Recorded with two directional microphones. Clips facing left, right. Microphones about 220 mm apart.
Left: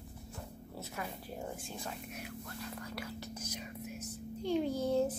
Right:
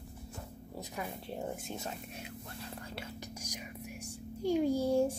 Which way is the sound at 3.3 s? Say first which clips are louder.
Left 1 dB; 15° right (ahead or behind).